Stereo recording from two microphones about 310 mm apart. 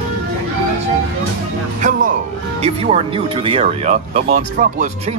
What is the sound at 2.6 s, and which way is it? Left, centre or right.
Speech, centre.